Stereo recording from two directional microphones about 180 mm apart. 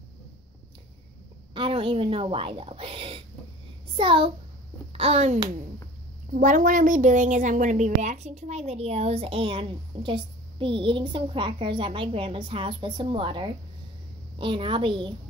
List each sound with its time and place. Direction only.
1.5 s a woman's voice: 30° right (ahead or behind)